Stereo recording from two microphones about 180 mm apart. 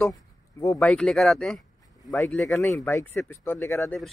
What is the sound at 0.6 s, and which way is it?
Speech, 15° left (ahead or behind).